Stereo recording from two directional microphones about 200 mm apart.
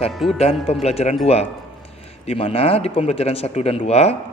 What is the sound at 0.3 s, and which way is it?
Speech, 30° left (ahead or behind).